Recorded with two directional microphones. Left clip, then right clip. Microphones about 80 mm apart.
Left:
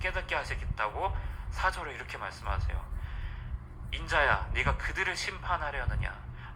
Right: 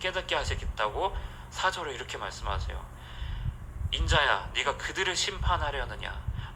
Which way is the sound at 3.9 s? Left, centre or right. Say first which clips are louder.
Right 2 dB; right.